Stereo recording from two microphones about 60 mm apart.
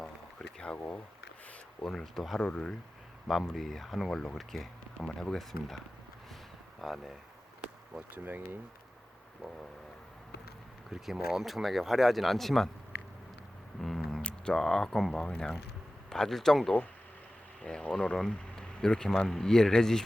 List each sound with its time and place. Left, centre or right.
0.0 s a sound: centre
1.8 s speech: centre
3.5 s speech: centre
6.8 s speech: centre
8.1 s speech: right
10.9 s speech: centre
13.8 s a sound: centre
14.6 s speech: centre